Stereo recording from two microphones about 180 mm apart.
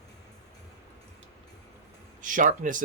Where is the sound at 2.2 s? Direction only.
45° right (ahead or behind).